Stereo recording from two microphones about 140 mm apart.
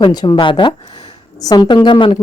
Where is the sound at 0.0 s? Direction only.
30° left (ahead or behind).